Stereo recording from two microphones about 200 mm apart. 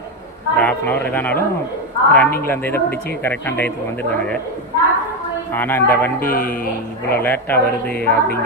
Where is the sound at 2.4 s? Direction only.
10° left (ahead or behind).